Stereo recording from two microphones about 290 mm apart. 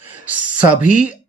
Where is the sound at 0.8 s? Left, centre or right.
Left.